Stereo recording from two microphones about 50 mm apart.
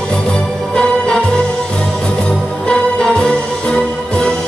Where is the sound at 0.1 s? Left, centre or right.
Centre.